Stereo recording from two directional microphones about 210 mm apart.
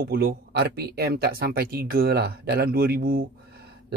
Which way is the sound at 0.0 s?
50° right (ahead or behind).